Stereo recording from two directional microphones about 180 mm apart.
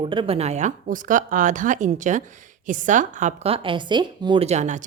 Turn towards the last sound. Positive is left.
turn(degrees=-40)  # may be behind; listen again after turning